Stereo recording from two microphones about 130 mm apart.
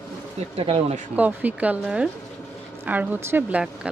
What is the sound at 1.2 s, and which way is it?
A woman's voice, 10° right (ahead or behind).